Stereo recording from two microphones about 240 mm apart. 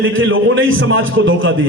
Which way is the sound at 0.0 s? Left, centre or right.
Right.